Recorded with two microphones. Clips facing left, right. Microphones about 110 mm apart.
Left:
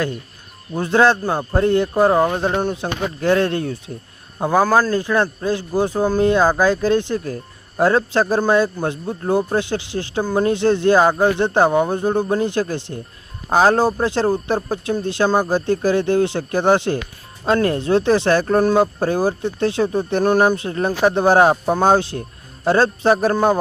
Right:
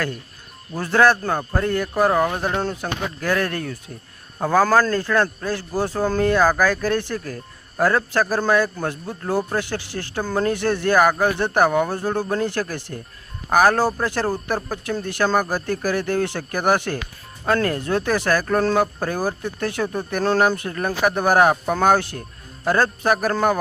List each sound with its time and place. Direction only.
0.7 s a man's voice: 20° left (ahead or behind)